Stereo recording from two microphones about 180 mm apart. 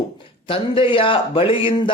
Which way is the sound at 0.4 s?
30° left (ahead or behind).